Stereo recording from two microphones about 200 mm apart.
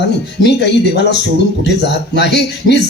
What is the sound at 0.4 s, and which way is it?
Speech, 60° left (ahead or behind).